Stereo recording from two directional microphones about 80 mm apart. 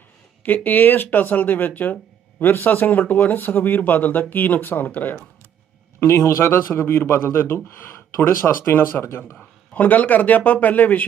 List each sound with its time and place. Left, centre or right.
0.4 s speech: left
6.0 s a man's voice: left